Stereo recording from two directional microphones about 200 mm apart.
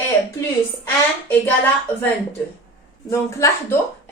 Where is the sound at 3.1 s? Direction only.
15° left (ahead or behind).